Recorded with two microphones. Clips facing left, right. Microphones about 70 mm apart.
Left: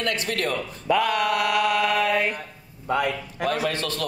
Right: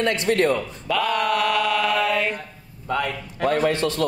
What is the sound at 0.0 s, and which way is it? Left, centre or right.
Speech, right.